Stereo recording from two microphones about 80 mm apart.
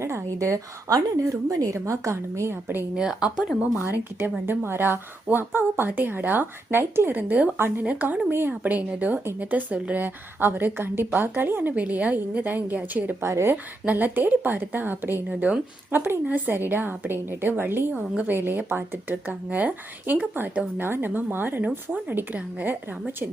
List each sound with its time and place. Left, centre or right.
0.0 s a woman's voice: right
2.9 s speech: centre
3.8 s a woman's voice: right
13.2 s a woman's voice: right
13.8 s a woman's voice: right